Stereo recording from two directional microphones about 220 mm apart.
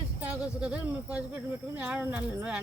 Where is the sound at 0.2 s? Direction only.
5° right (ahead or behind).